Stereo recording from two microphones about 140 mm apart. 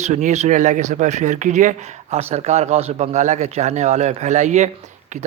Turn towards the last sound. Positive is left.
turn(degrees=-55)  # may be behind; listen again after turning